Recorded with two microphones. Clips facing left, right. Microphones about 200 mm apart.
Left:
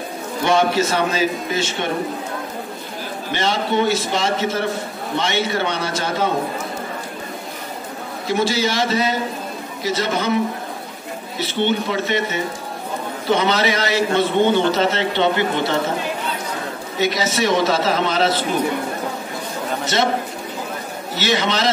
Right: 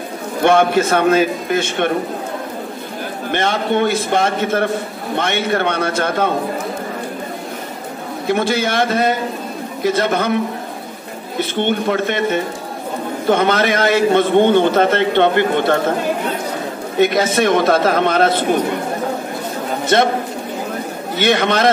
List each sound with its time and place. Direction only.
0.4 s a man's voice: 55° right (ahead or behind)
3.3 s a man's voice: 55° right (ahead or behind)
8.3 s a man's voice: 55° right (ahead or behind)
11.3 s a man's voice: 55° right (ahead or behind)
17.0 s a man's voice: 55° right (ahead or behind)
19.9 s a man's voice: 55° right (ahead or behind)
21.2 s a man's voice: 55° right (ahead or behind)